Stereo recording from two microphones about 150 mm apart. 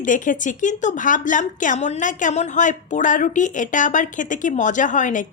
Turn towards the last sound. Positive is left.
turn(degrees=60)  # may be behind; listen again after turning